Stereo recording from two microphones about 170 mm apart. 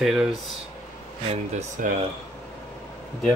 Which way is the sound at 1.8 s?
50° right (ahead or behind).